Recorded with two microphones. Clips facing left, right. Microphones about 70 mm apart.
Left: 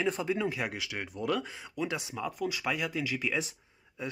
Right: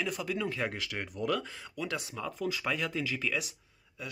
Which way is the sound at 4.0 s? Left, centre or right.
Left.